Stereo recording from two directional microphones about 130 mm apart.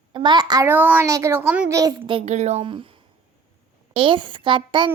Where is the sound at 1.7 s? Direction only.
25° right (ahead or behind).